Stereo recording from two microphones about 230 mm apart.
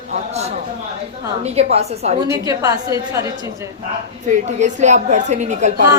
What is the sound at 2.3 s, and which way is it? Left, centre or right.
Speech, centre.